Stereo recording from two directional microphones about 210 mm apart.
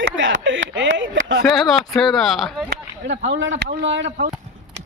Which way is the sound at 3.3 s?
65° right (ahead or behind).